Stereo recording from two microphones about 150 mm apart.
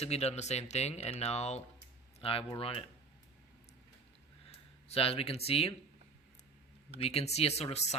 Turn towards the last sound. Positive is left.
turn(degrees=45)  # may be behind; listen again after turning